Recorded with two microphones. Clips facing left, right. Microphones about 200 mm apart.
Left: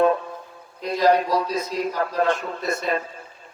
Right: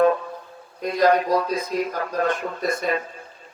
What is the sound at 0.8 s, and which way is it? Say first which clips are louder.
A man's voice: even; 50° right (ahead or behind).